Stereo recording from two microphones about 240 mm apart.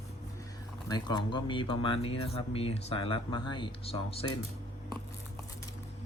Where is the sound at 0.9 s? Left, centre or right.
Centre.